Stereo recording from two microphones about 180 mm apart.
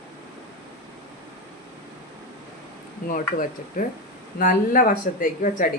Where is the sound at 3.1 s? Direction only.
50° left (ahead or behind).